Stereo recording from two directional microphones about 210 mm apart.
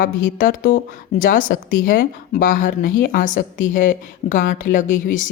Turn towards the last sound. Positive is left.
turn(degrees=40)  # may be behind; listen again after turning